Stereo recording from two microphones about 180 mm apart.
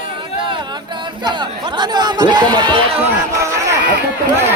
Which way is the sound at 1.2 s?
25° right (ahead or behind).